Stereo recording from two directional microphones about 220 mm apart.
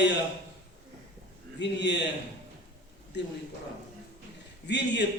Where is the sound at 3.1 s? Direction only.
50° left (ahead or behind).